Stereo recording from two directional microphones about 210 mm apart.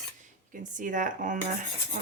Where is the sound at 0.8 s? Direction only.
40° right (ahead or behind).